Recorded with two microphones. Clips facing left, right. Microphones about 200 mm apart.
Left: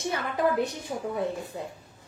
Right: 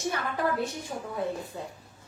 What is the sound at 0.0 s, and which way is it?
A woman's voice, 20° left (ahead or behind).